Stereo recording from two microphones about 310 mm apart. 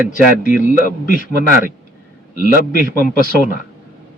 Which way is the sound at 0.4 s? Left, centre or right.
Left.